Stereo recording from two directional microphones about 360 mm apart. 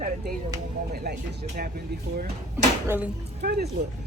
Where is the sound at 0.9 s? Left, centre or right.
Right.